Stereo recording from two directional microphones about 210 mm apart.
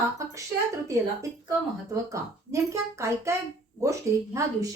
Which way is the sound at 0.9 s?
15° right (ahead or behind).